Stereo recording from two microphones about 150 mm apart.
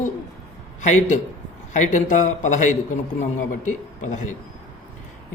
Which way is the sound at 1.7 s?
55° left (ahead or behind).